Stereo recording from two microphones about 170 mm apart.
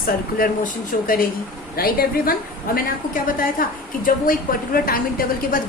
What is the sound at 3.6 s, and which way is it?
A woman's voice, 55° left (ahead or behind).